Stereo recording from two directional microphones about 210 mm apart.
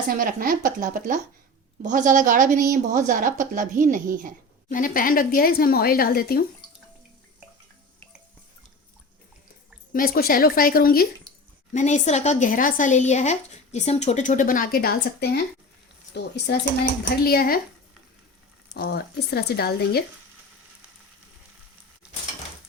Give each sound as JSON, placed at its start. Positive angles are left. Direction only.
{"t": 0.2, "sound": "a woman's voice", "side_deg": -40}
{"t": 4.7, "sound": "a woman's voice", "side_deg": 40}
{"t": 9.9, "sound": "a woman's voice", "side_deg": 45}
{"t": 18.7, "sound": "a woman's voice", "side_deg": 50}